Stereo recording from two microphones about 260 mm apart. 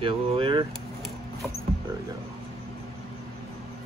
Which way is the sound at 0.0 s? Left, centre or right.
Centre.